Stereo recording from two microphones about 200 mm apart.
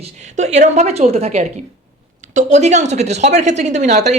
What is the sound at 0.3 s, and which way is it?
A woman's voice, 35° right (ahead or behind).